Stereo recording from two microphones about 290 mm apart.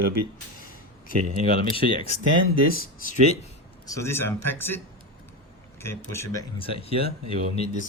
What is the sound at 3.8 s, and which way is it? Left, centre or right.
Speech, centre.